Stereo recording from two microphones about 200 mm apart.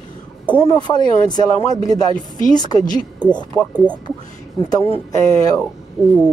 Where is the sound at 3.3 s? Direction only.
5° left (ahead or behind).